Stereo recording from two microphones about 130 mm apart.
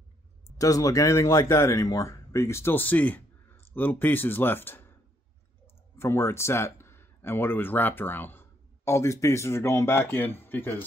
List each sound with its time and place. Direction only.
0.6 s speech: 25° left (ahead or behind)
5.9 s speech: 20° left (ahead or behind)